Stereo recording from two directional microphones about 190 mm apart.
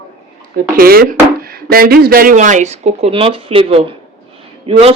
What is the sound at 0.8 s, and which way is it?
Speech, 50° right (ahead or behind).